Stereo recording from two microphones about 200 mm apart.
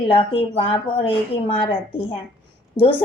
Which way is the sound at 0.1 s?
25° left (ahead or behind).